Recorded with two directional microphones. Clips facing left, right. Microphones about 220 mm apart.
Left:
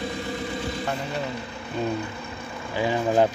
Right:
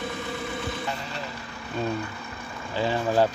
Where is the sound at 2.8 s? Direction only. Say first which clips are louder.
Left 2 dB; 15° left (ahead or behind).